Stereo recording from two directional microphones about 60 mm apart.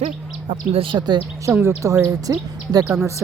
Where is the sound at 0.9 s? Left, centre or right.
Right.